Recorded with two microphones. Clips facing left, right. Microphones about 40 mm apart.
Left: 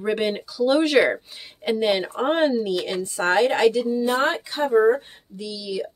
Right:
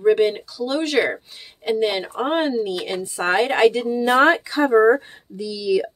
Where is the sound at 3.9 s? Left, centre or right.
Right.